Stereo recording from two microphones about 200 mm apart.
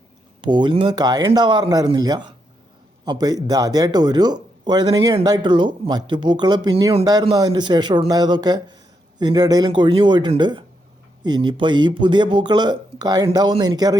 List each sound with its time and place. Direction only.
0.4 s speech: 25° right (ahead or behind)